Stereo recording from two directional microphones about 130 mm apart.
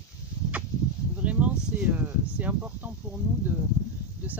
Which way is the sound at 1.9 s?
10° right (ahead or behind).